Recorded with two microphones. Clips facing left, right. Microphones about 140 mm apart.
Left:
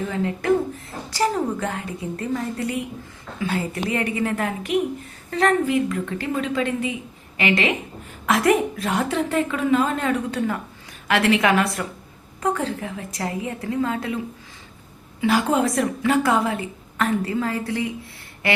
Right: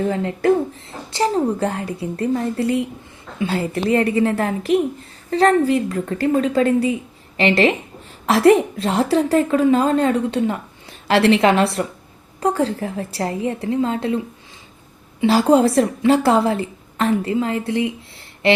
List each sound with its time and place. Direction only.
0.0 s a woman's voice: 35° right (ahead or behind)
15.2 s a woman's voice: 35° right (ahead or behind)
18.4 s a sound: 25° right (ahead or behind)